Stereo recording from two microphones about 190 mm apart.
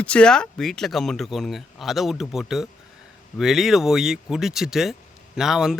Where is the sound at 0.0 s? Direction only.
5° left (ahead or behind).